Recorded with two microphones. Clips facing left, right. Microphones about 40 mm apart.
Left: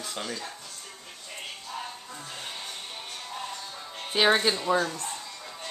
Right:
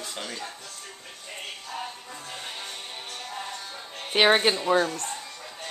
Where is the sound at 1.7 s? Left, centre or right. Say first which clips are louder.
Right 2 dB; right.